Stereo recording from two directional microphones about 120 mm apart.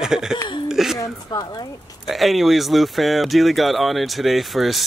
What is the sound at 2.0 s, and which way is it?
Speech, centre (ahead or behind).